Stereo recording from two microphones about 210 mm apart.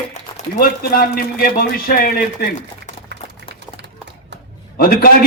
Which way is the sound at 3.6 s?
55° right (ahead or behind).